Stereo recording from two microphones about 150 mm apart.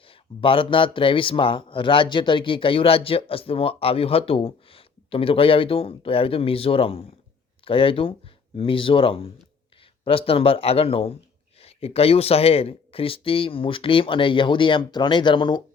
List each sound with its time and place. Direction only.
0.4 s speech: 35° left (ahead or behind)